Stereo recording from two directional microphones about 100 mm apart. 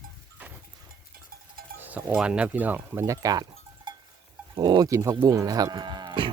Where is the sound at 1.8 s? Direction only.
20° right (ahead or behind).